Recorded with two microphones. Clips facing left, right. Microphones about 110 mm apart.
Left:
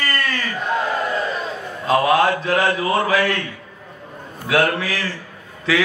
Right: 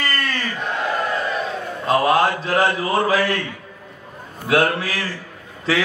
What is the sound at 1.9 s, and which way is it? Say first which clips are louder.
A man's voice: left 1 dB; 35° right (ahead or behind).